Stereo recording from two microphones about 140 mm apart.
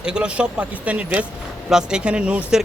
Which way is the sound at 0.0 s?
5° right (ahead or behind).